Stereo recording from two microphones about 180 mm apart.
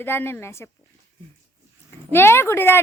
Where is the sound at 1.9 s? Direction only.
10° left (ahead or behind).